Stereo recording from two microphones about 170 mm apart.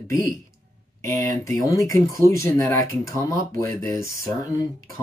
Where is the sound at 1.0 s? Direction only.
20° left (ahead or behind).